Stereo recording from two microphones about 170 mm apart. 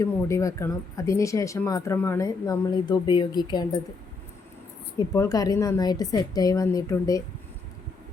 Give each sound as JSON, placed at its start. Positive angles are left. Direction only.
{"t": 0.0, "sound": "speech", "side_deg": 20}
{"t": 4.9, "sound": "speech", "side_deg": 20}